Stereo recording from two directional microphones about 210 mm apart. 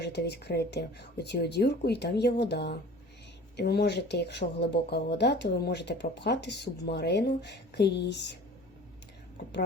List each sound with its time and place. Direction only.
0.0 s speech: 55° left (ahead or behind)